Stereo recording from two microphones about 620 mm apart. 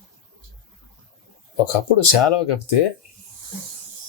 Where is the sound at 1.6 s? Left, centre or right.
Left.